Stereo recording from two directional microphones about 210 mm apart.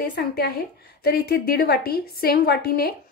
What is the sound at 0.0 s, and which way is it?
Speech, 45° left (ahead or behind).